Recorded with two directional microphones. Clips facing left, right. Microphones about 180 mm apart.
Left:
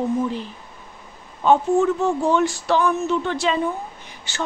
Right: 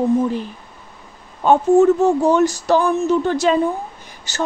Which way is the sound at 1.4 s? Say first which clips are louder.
Right 4 dB; 45° right (ahead or behind).